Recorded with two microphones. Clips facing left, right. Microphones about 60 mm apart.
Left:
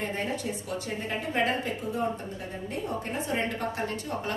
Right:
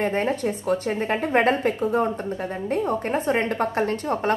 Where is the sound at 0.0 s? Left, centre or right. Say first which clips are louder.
Right 8 dB; right.